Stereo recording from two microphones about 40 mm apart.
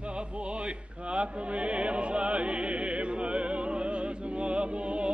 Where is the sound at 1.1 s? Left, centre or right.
Right.